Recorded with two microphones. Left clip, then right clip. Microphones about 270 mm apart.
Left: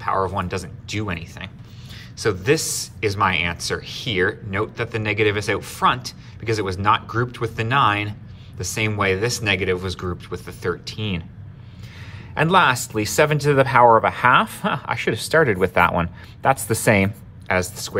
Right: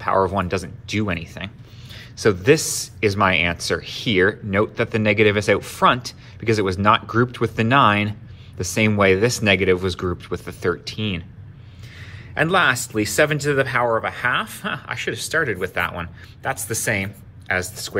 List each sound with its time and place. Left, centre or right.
0.0 s speech: centre
12.4 s speech: centre